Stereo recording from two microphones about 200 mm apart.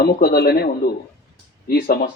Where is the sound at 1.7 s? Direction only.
50° left (ahead or behind).